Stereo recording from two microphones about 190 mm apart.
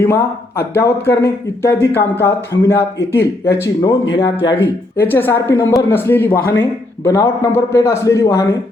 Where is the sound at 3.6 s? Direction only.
15° left (ahead or behind).